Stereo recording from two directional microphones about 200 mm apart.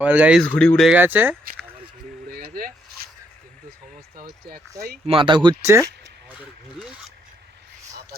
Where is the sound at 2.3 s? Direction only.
45° right (ahead or behind).